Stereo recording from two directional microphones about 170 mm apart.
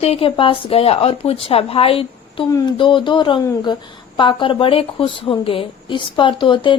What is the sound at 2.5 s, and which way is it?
A woman's voice, 20° left (ahead or behind).